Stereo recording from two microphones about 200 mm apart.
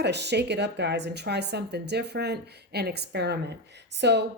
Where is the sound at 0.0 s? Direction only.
55° right (ahead or behind).